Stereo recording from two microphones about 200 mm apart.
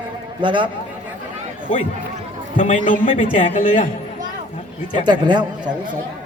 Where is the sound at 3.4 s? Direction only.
25° left (ahead or behind).